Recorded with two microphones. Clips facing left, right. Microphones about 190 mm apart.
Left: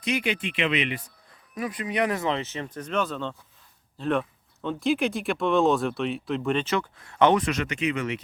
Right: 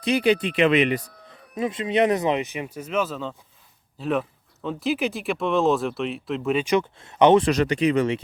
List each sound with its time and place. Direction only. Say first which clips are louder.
0.0 s speech: right 7 dB; 35° right (ahead or behind)
1.5 s speech: right 5 dB; 25° right (ahead or behind); by 6.7 s 5° right (ahead or behind)
6.7 s speech: right 6 dB; 20° right (ahead or behind)
7.4 s speech: right 7 dB; 35° right (ahead or behind)